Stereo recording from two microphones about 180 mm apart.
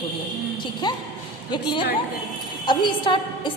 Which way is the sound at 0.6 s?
25° left (ahead or behind).